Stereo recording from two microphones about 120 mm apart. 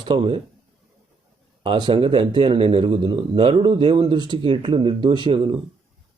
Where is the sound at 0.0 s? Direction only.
45° right (ahead or behind).